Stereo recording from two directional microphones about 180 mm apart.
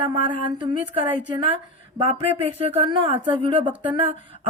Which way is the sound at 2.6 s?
35° right (ahead or behind).